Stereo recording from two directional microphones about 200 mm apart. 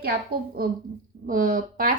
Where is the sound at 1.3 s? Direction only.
45° right (ahead or behind).